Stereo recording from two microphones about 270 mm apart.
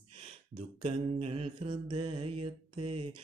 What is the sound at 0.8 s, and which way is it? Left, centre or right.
Speech, right.